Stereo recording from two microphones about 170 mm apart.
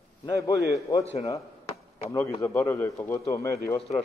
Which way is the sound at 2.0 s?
20° left (ahead or behind).